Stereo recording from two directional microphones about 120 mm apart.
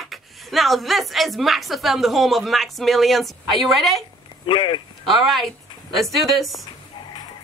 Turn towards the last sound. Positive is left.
turn(degrees=0)  # may be behind; listen again after turning